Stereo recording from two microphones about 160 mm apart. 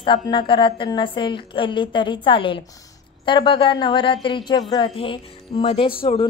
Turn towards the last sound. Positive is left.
turn(degrees=35)  # may be behind; listen again after turning